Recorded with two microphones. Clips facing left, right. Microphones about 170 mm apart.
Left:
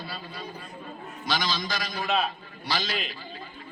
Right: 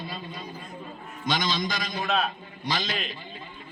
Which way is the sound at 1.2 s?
20° right (ahead or behind).